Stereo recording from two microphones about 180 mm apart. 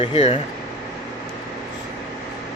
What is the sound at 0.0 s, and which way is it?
Speech, 35° left (ahead or behind).